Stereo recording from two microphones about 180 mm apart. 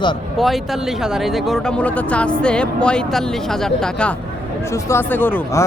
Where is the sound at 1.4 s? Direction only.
5° left (ahead or behind).